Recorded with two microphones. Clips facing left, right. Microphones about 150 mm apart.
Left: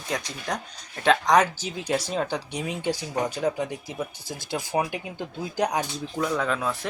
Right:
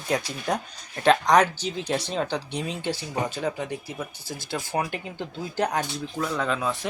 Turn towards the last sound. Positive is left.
turn(degrees=0)  # may be behind; listen again after turning